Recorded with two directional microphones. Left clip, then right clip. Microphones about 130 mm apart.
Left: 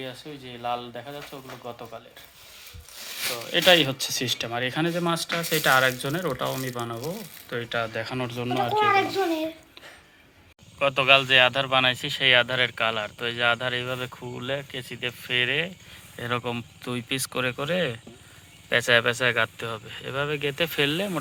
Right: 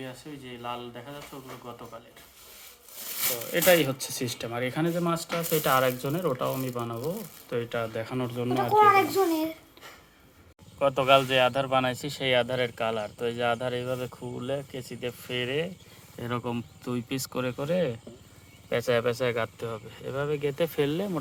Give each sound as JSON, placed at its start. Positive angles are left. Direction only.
{"t": 0.0, "sound": "speech", "side_deg": 55}
{"t": 3.5, "sound": "speech", "side_deg": -5}
{"t": 10.8, "sound": "speech", "side_deg": -5}